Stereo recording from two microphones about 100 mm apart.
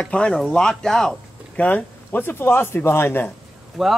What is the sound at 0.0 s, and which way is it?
Speech, 10° left (ahead or behind).